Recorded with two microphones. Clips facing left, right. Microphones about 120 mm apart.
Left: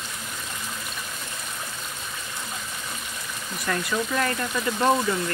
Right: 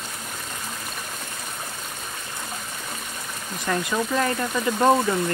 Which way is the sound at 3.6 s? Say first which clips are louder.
Right 2 dB; 15° right (ahead or behind).